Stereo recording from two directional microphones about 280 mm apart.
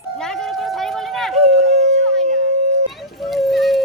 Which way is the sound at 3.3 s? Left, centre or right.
Centre.